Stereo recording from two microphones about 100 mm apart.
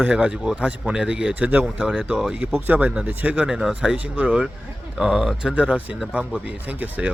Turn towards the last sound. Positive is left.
turn(degrees=-15)  # may be behind; listen again after turning